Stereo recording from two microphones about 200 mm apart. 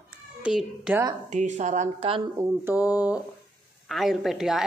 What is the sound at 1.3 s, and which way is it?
Speech, 35° right (ahead or behind).